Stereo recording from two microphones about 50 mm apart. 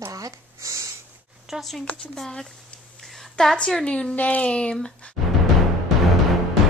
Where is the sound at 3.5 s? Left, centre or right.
Centre.